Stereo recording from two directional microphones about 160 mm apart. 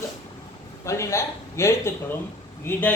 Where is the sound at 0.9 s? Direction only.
15° left (ahead or behind).